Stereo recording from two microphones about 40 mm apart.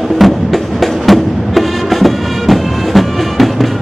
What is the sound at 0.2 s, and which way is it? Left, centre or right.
Music, centre.